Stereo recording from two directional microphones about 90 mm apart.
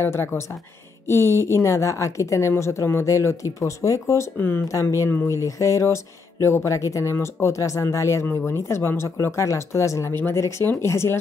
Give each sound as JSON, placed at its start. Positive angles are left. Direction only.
{"t": 0.0, "sound": "a woman's voice", "side_deg": 25}